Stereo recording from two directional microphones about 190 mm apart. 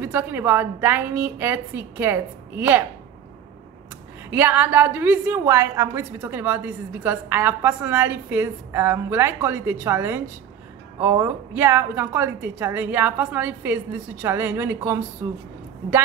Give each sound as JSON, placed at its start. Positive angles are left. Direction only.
{"t": 0.0, "sound": "a woman's voice", "side_deg": -10}
{"t": 4.3, "sound": "a woman's voice", "side_deg": -10}